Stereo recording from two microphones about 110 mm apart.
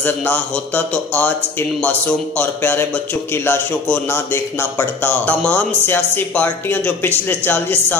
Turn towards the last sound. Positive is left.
turn(degrees=20)  # may be behind; listen again after turning